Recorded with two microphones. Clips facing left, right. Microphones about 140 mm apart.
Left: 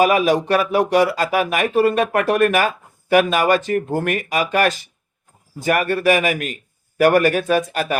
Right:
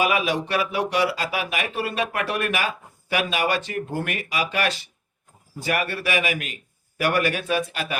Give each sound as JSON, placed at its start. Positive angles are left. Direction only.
{"t": 0.0, "sound": "speech", "side_deg": 45}